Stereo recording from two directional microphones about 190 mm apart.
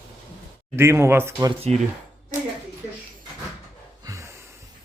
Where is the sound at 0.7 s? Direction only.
15° right (ahead or behind).